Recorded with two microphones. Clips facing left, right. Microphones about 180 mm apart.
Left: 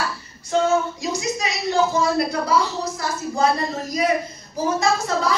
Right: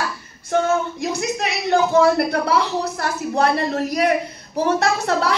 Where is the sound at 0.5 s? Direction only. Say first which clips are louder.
Even; 60° right (ahead or behind).